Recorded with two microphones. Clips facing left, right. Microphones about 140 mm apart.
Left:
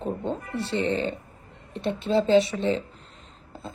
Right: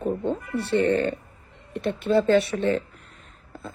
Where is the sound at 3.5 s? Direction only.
25° left (ahead or behind).